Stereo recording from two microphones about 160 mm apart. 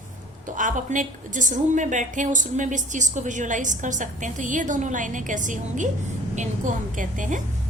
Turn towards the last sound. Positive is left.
turn(degrees=-55)  # may be behind; listen again after turning